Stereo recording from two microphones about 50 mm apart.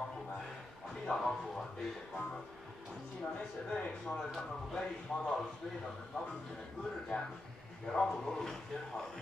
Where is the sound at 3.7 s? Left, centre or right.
Centre.